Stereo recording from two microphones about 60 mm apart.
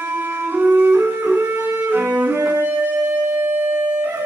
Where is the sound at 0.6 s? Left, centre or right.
Right.